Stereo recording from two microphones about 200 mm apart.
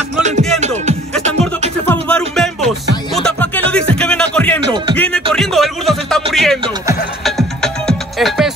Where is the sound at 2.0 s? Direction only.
5° left (ahead or behind).